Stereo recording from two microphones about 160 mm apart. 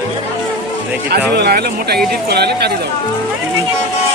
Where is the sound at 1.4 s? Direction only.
80° right.